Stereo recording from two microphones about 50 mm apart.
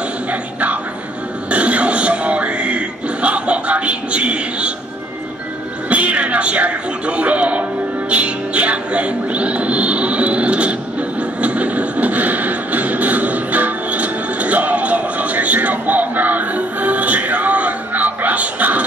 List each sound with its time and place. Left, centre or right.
0.3 s music: right
1.5 s a sound: right
5.9 s music: right